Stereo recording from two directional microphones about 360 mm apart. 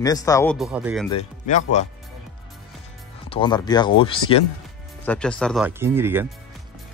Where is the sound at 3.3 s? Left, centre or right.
Centre.